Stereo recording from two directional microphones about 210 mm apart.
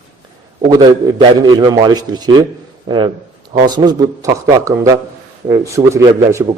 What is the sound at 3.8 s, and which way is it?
A man's voice, 15° right (ahead or behind).